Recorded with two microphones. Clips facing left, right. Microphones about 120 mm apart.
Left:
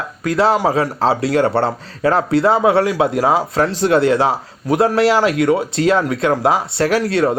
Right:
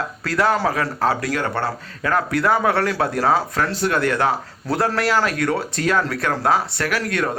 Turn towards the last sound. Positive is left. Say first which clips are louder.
# left 7 dB
turn(degrees=30)  # may be behind; listen again after turning